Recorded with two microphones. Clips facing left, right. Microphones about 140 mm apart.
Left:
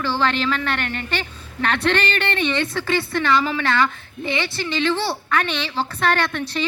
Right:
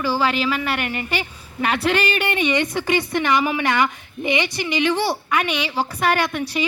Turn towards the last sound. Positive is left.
turn(degrees=-10)  # may be behind; listen again after turning